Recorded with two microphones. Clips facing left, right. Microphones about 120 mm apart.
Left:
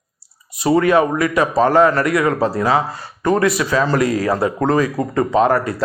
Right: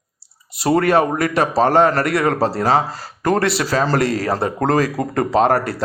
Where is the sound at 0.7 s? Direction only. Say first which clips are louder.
Left 1 dB; 60° right (ahead or behind).